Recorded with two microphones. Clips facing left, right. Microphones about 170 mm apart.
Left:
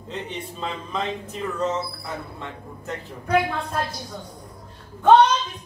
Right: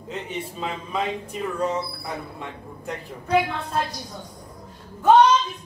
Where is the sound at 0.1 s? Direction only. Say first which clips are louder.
Right 1 dB; 5° right (ahead or behind).